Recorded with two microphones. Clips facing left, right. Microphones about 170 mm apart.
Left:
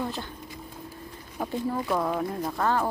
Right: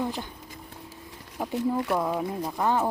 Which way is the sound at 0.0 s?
15° right (ahead or behind).